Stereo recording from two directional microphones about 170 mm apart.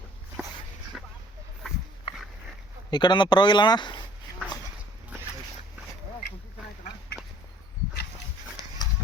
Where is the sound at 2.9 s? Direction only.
25° left (ahead or behind).